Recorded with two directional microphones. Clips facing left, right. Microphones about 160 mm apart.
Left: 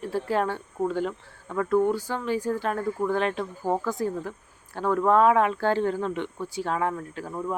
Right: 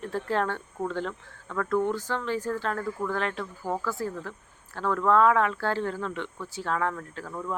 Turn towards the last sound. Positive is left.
turn(degrees=20)  # may be behind; listen again after turning